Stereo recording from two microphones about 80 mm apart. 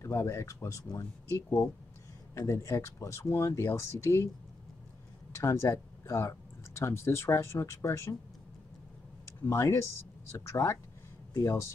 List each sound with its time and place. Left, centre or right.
0.0 s speech: left
2.3 s speech: left
5.3 s speech: left
9.4 s speech: left